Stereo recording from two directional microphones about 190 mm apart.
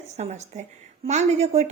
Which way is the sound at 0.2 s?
35° right (ahead or behind).